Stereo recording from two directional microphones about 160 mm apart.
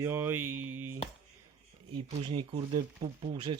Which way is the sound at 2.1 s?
30° right (ahead or behind).